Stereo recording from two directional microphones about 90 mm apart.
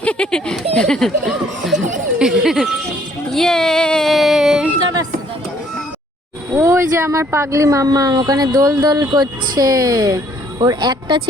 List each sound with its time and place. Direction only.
0.0 s speech: 10° left (ahead or behind); by 2.6 s 5° right (ahead or behind)
3.3 s a sound: 5° left (ahead or behind)
6.5 s speech: 25° right (ahead or behind)
10.6 s speech: 55° right (ahead or behind)